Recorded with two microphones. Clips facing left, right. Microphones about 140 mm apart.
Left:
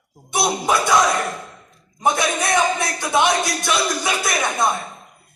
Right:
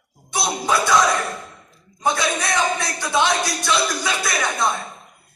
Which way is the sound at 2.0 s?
20° left (ahead or behind).